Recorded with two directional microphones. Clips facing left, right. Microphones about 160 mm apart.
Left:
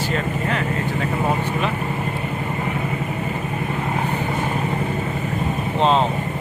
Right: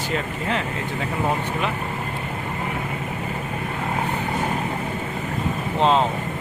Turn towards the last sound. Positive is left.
turn(degrees=20)  # may be behind; listen again after turning